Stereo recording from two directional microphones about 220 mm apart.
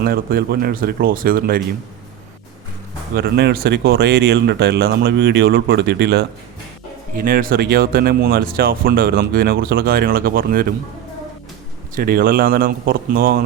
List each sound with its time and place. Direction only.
0.0 s speech: 45° right (ahead or behind)
3.2 s speech: 50° right (ahead or behind)
11.9 s speech: 45° right (ahead or behind)